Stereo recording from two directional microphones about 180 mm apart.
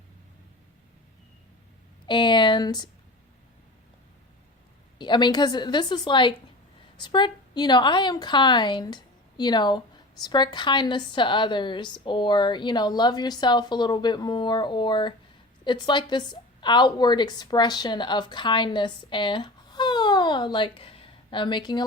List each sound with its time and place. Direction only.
2.0 s speech: 25° left (ahead or behind)
4.9 s a woman's voice: 25° left (ahead or behind)